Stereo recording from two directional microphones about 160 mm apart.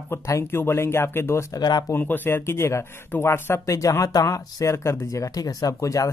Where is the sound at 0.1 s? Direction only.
15° left (ahead or behind).